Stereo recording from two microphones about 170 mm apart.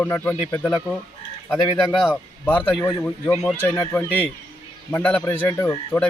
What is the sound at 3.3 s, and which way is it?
Speech, 5° left (ahead or behind).